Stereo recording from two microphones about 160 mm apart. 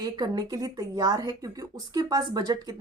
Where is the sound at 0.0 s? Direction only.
25° right (ahead or behind).